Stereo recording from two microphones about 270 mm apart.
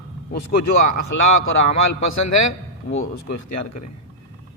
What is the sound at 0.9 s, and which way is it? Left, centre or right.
A man's voice, left.